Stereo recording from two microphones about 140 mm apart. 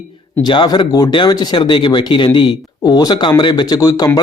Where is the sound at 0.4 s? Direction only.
30° left (ahead or behind).